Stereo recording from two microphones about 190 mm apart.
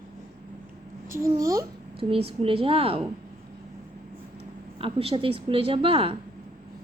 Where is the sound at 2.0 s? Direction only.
30° right (ahead or behind).